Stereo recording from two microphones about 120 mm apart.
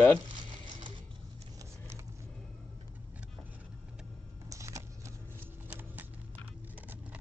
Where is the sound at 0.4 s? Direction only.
45° right (ahead or behind).